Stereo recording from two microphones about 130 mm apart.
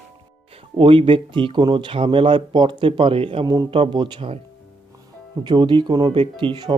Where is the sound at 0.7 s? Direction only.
45° right (ahead or behind).